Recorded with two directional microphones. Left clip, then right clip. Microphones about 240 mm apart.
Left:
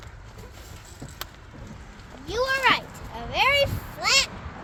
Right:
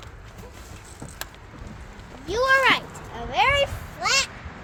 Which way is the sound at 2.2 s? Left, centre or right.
Centre.